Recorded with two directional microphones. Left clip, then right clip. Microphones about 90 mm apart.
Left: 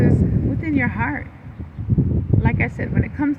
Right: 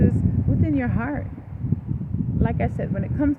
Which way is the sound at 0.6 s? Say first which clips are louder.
Left 4 dB; 70° right (ahead or behind).